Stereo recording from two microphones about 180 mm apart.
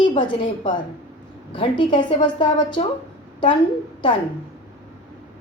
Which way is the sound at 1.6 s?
25° left (ahead or behind).